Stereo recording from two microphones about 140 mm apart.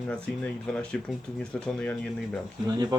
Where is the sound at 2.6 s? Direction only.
30° right (ahead or behind).